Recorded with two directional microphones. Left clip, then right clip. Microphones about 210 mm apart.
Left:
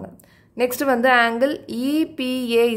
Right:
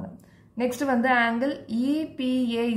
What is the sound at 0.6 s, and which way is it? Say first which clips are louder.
A woman's voice: left 6 dB; 50° left (ahead or behind).